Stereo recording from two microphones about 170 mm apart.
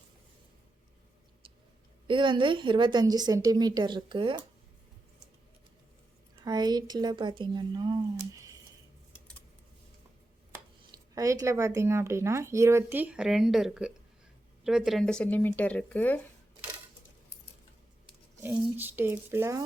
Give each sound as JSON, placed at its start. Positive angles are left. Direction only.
{"t": 2.0, "sound": "a woman's voice", "side_deg": -30}
{"t": 6.4, "sound": "a woman's voice", "side_deg": -25}
{"t": 10.5, "sound": "speech", "side_deg": -20}
{"t": 18.4, "sound": "speech", "side_deg": -10}